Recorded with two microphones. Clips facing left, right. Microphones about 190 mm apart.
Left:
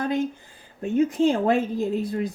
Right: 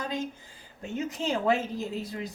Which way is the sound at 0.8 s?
55° left (ahead or behind).